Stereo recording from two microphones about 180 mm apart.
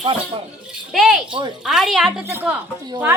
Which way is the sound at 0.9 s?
Centre (ahead or behind).